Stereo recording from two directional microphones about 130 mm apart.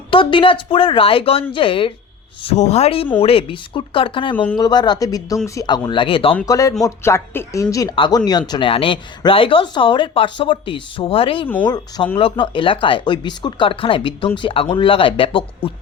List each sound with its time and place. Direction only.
0.1 s speech: 40° left (ahead or behind)
2.6 s speech: 60° left (ahead or behind); by 6.3 s 40° left (ahead or behind)
6.4 s speech: 25° left (ahead or behind); by 11.4 s 45° left (ahead or behind)
11.6 s speech: 35° left (ahead or behind)